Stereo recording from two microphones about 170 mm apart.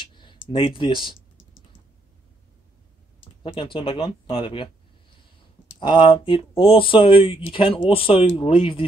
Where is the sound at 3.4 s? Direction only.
30° left (ahead or behind).